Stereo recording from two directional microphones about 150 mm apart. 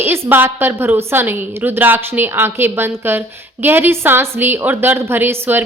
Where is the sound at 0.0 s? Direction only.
15° right (ahead or behind).